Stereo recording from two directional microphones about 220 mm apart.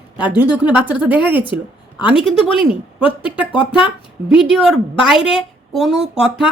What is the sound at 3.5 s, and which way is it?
Speech, 20° left (ahead or behind).